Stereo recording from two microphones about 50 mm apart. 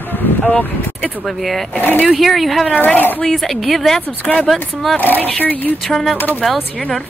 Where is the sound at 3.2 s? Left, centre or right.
Centre.